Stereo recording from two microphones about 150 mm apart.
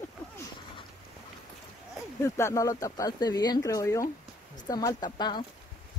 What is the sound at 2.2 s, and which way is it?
Speech, 20° left (ahead or behind).